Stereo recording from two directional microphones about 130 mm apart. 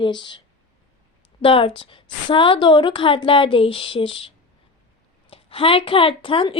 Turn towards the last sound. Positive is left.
turn(degrees=40)  # may be behind; listen again after turning